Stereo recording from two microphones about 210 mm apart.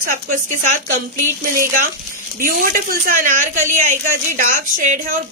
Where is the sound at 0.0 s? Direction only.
35° right (ahead or behind).